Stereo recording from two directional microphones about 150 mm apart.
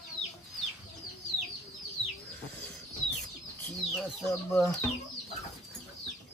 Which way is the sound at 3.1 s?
5° left (ahead or behind).